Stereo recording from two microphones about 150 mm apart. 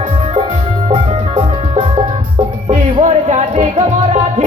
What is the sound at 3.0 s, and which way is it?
Music, 50° right (ahead or behind).